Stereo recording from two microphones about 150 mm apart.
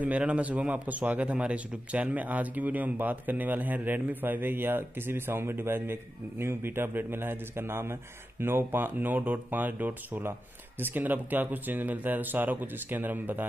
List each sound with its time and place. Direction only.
0.0 s a man's voice: 10° right (ahead or behind)